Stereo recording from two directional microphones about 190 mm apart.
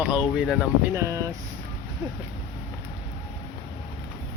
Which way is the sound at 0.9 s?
15° right (ahead or behind).